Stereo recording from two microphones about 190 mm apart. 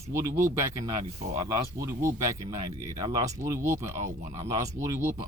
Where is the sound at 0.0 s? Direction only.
15° right (ahead or behind).